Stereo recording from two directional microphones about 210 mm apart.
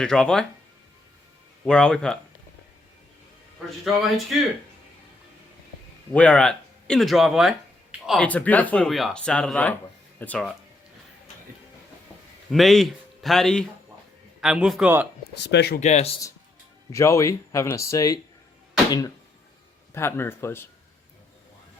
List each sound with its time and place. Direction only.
0.0 s speech: 5° left (ahead or behind)
1.6 s speech: 5° left (ahead or behind)
3.8 s speech: centre (ahead or behind)
6.1 s speech: 5° left (ahead or behind)
12.5 s speech: centre (ahead or behind)
15.4 s speech: 50° left (ahead or behind)
15.8 s speech: 30° left (ahead or behind)
16.9 s speech: 15° left (ahead or behind)